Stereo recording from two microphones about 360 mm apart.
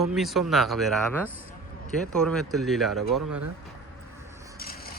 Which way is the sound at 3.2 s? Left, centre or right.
Right.